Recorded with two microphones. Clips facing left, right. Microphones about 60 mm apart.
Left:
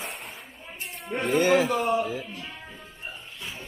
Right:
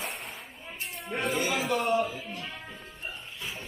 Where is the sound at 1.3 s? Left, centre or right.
Left.